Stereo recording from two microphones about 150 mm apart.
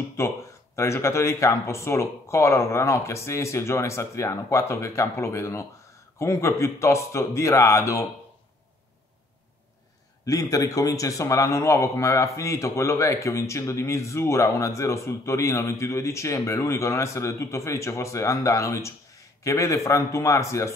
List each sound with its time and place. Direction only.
0.2 s a man's voice: 20° left (ahead or behind)
10.2 s a man's voice: 25° left (ahead or behind)